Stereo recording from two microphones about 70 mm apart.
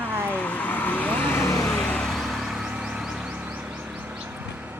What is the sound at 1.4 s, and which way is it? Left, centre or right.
Vehicle, left.